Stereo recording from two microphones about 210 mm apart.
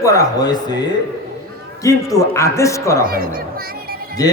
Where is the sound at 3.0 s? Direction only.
45° right (ahead or behind).